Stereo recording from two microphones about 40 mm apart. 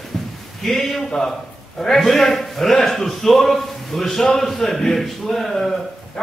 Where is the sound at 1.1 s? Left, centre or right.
Centre.